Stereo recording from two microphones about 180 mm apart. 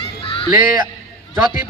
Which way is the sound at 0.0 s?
30° left (ahead or behind).